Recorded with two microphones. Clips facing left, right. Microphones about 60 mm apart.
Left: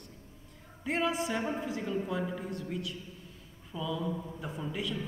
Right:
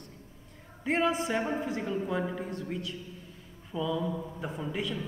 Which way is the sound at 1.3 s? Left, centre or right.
Centre.